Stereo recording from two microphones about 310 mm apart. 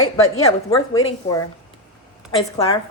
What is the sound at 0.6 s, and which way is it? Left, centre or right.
Speech, centre.